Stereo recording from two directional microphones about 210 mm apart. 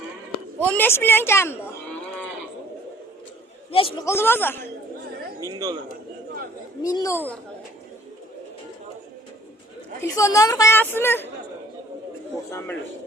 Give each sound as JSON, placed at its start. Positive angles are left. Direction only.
{"t": 0.7, "sound": "a woman's voice", "side_deg": 10}
{"t": 3.7, "sound": "a man's voice", "side_deg": 25}
{"t": 4.0, "sound": "a woman's voice", "side_deg": 10}
{"t": 5.4, "sound": "speech", "side_deg": -15}
{"t": 6.8, "sound": "a woman's voice", "side_deg": 15}
{"t": 10.0, "sound": "a woman's voice", "side_deg": 15}
{"t": 12.5, "sound": "a woman's voice", "side_deg": 10}